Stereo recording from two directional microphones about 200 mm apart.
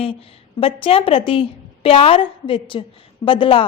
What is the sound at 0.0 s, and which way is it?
A woman's voice, 30° left (ahead or behind).